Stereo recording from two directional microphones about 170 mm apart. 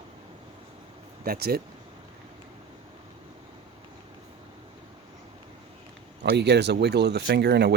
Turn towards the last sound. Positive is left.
turn(degrees=-75)  # may be behind; listen again after turning